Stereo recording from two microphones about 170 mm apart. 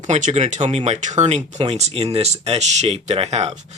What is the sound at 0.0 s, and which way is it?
Speech, 45° right (ahead or behind).